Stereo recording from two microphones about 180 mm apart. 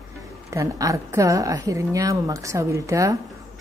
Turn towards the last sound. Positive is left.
turn(degrees=-15)  # may be behind; listen again after turning